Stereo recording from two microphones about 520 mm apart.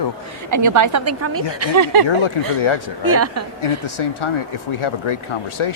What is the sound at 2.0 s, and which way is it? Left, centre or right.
Speech, left.